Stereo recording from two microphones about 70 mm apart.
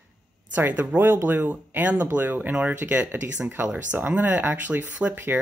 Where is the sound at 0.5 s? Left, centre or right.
Right.